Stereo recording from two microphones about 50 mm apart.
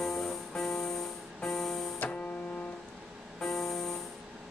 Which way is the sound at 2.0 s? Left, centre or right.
Left.